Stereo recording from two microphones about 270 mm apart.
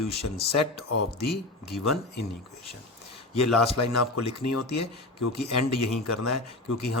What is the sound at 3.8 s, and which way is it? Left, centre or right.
Speech, left.